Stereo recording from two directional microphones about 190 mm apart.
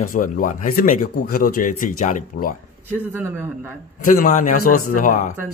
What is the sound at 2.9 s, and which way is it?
Speech, 10° right (ahead or behind).